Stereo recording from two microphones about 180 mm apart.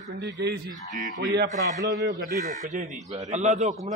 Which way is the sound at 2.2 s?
50° right (ahead or behind).